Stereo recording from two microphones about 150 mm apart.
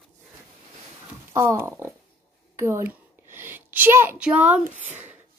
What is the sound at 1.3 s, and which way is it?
Speech, 20° right (ahead or behind).